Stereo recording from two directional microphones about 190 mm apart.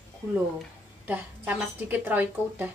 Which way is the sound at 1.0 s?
10° right (ahead or behind).